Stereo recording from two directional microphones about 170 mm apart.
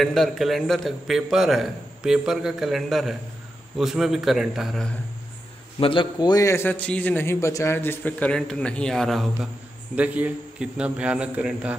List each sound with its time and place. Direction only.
0.0 s a man's voice: centre (ahead or behind)
5.8 s a man's voice: 30° left (ahead or behind); by 11.7 s 5° right (ahead or behind)